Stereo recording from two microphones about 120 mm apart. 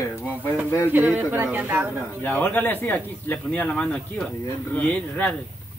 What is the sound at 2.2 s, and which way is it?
Speech, 15° left (ahead or behind).